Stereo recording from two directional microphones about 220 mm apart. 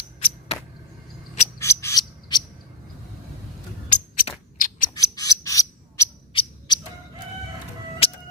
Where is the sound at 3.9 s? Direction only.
30° left (ahead or behind).